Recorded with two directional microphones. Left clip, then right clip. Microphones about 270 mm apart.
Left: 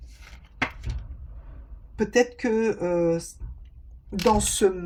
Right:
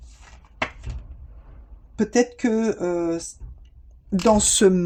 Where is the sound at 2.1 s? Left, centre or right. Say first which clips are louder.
Right 1 dB; right.